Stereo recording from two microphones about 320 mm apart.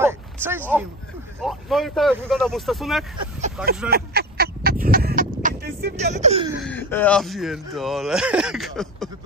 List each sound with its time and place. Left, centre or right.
0.0 s a sound: centre
1.4 s speech: centre
3.9 s duck: right
6.2 s laughter: centre
6.5 s speech: centre